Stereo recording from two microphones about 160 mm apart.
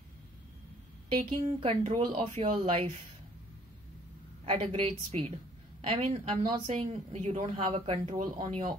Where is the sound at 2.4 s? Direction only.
35° right (ahead or behind).